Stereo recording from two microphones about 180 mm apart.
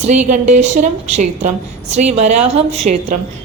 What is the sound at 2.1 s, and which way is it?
Speech, 35° right (ahead or behind).